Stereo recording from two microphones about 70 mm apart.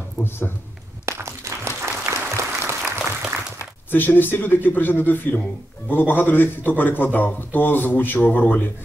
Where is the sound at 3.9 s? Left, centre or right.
Left.